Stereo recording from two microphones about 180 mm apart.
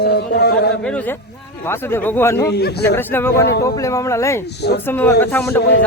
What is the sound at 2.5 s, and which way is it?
Speech, 65° left (ahead or behind).